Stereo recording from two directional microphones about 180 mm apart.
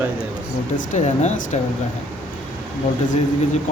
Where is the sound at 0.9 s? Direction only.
40° left (ahead or behind).